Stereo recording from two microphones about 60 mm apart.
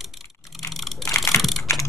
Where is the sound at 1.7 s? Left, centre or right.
Left.